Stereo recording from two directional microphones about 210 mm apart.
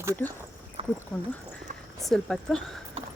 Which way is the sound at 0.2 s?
10° left (ahead or behind).